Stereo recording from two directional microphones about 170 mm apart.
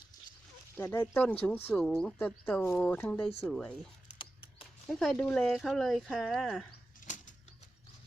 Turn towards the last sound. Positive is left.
turn(degrees=45)  # may be behind; listen again after turning